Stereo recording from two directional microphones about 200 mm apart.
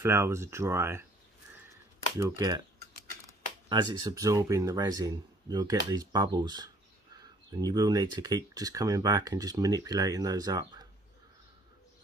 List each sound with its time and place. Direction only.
0.0 s speech: 10° right (ahead or behind)
2.1 s speech: 15° right (ahead or behind)